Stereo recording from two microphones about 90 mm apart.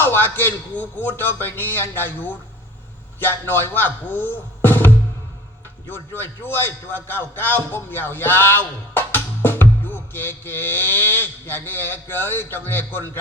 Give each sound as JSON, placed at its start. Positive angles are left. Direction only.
{"t": 0.0, "sound": "a man's voice", "side_deg": 25}